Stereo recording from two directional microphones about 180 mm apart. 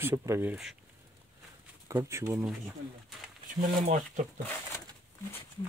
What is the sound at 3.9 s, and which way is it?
Speech, 45° right (ahead or behind).